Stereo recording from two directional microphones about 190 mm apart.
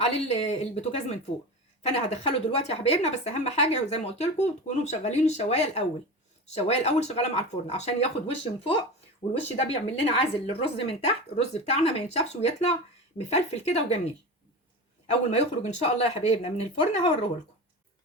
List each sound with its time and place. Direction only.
0.0 s a woman's voice: 35° left (ahead or behind)
9.6 s a woman's voice: 30° left (ahead or behind)
15.0 s a woman's voice: 35° left (ahead or behind)